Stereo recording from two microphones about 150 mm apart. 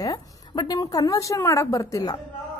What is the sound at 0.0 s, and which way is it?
A woman's voice, 25° left (ahead or behind).